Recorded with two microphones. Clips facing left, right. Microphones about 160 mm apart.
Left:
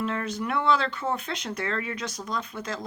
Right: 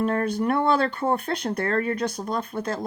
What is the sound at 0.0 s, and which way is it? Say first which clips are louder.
Speech: right 6 dB; 45° right (ahead or behind).